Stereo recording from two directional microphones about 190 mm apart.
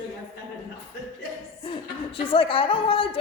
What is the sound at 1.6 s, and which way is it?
A woman's voice, 30° left (ahead or behind).